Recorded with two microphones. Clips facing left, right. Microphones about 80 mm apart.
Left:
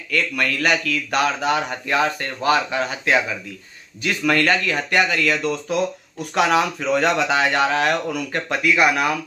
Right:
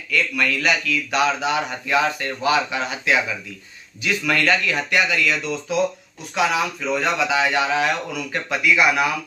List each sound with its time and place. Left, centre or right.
0.1 s speech: left
6.3 s speech: left